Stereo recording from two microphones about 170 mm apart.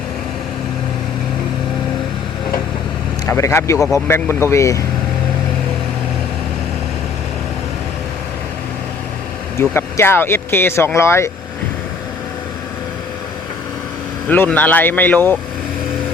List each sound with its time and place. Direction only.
3.2 s speech: 15° left (ahead or behind)
9.6 s speech: 15° left (ahead or behind)
14.3 s speech: 10° left (ahead or behind)